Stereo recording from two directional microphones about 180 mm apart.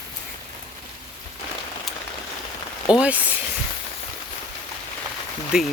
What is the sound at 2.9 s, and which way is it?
Speech, 5° right (ahead or behind).